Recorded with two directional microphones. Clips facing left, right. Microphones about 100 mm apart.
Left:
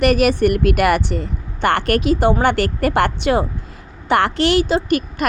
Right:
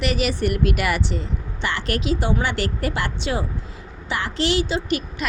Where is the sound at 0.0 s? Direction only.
55° left (ahead or behind).